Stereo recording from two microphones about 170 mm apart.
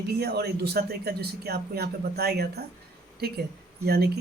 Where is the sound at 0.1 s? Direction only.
70° right (ahead or behind).